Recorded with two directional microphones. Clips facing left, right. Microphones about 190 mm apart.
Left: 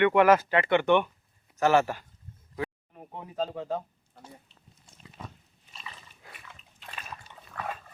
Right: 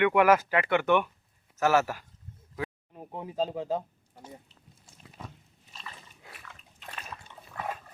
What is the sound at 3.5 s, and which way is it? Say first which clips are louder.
Speech: right 2 dB; 10° right (ahead or behind).